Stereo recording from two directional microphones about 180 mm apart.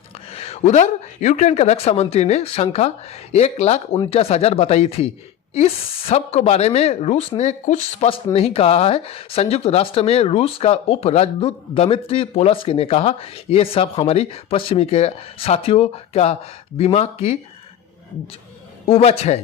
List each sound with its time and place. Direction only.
0.1 s speech: 35° left (ahead or behind)
18.9 s speech: 35° left (ahead or behind)